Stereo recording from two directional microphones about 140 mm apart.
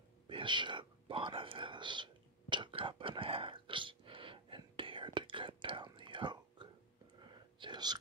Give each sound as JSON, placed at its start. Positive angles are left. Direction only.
{"t": 0.3, "sound": "speech", "side_deg": -35}
{"t": 2.5, "sound": "whispering", "side_deg": -35}